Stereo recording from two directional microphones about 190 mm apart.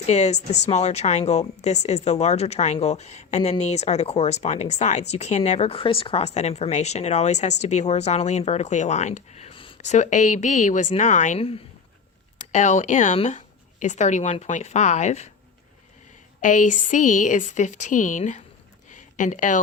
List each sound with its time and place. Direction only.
0.1 s a woman's voice: 35° left (ahead or behind)
16.4 s a woman's voice: 45° left (ahead or behind)
18.9 s a sound: 40° left (ahead or behind)